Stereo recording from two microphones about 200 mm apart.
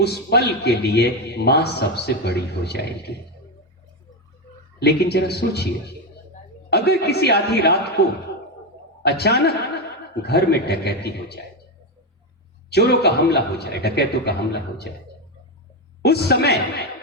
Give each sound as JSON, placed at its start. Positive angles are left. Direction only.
{"t": 0.0, "sound": "a man's voice", "side_deg": 55}
{"t": 4.8, "sound": "a man's voice", "side_deg": 55}
{"t": 6.7, "sound": "a man's voice", "side_deg": 55}
{"t": 12.7, "sound": "a man's voice", "side_deg": 55}
{"t": 16.0, "sound": "a man's voice", "side_deg": 55}